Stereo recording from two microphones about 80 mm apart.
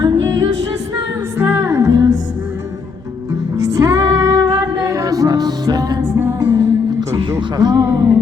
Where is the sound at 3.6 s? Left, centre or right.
Right.